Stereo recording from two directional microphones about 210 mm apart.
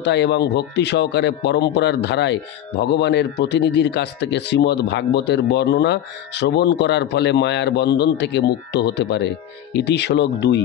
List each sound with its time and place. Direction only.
0.0 s speech: 55° left (ahead or behind)